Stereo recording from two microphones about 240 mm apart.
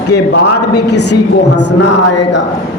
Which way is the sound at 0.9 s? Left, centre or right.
Left.